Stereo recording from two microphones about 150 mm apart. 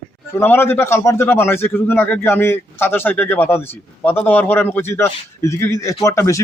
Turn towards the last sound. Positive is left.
turn(degrees=20)  # may be behind; listen again after turning